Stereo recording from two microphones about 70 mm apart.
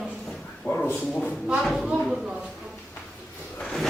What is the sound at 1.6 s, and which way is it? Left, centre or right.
Speech, centre.